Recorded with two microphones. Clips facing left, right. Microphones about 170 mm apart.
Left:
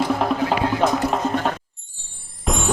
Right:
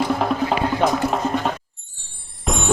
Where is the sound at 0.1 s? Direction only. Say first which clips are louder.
Even; centre (ahead or behind).